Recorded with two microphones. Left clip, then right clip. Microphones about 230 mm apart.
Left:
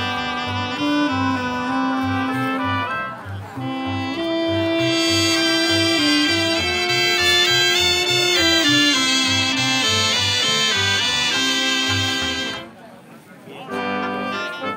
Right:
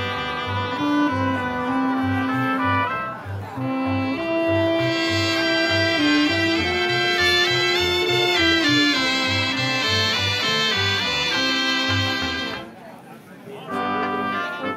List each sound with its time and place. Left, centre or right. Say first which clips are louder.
0.0 s music: left 2 dB; left
13.7 s music: even; left